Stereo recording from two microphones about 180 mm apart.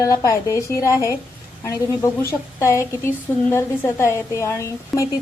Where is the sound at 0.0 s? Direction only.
20° left (ahead or behind).